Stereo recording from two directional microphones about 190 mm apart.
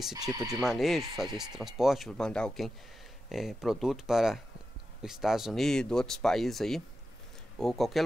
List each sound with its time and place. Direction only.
0.1 s speech: 20° right (ahead or behind)
0.7 s speech: centre (ahead or behind)